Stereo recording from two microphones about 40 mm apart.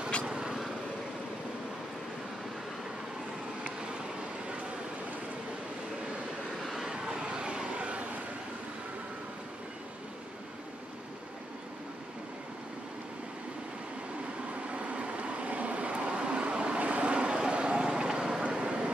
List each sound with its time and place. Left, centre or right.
0.3 s vehicle: centre
6.6 s vehicle: centre
6.9 s vehicle: right
14.7 s vehicle: right